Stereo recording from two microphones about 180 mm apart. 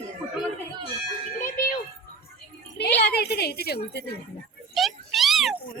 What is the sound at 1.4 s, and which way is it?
Music, 45° left (ahead or behind).